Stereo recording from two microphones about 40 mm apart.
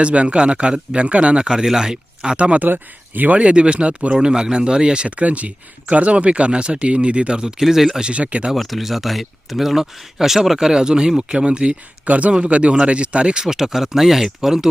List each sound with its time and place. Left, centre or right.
0.0 s speech: right
2.6 s speech: right
3.3 s speech: right
5.0 s speech: right
7.6 s speech: centre
8.0 s speech: right
8.5 s speech: centre
10.7 s speech: centre
12.0 s speech: right
13.4 s speech: centre